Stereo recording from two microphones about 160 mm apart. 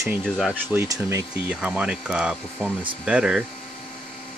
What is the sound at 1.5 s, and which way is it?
Speech, 5° right (ahead or behind).